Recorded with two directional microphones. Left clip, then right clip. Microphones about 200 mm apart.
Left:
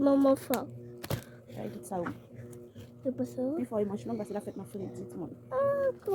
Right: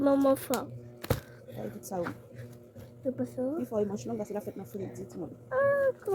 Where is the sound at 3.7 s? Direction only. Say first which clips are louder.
Right 1 dB; 10° right (ahead or behind).